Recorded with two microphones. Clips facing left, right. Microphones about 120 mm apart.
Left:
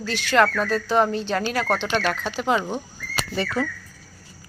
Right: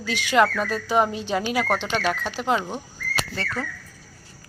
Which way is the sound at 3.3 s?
15° left (ahead or behind).